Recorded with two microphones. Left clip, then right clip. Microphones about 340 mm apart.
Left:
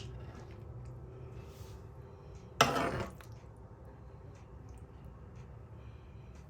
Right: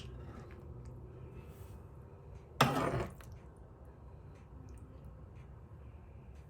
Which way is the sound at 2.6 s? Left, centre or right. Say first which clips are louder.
Left 2 dB; centre.